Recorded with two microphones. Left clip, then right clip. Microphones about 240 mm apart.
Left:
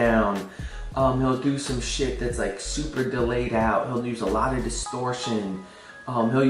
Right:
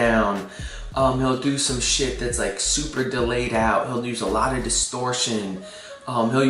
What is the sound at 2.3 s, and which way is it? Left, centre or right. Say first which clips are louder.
Speech: right 4 dB; centre.